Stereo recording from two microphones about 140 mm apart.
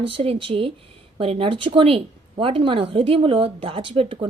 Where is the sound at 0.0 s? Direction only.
40° right (ahead or behind).